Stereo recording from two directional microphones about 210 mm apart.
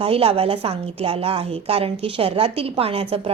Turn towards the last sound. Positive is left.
turn(degrees=-25)  # may be behind; listen again after turning